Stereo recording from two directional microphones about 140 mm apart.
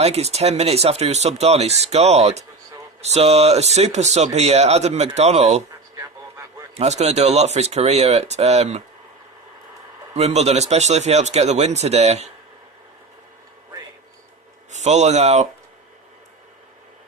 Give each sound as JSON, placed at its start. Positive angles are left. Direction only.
{"t": 0.0, "sound": "speech", "side_deg": -50}
{"t": 6.7, "sound": "speech", "side_deg": -50}
{"t": 10.2, "sound": "speech", "side_deg": -50}
{"t": 14.7, "sound": "speech", "side_deg": -55}